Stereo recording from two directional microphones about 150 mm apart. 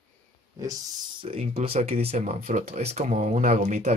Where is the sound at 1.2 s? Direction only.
40° right (ahead or behind).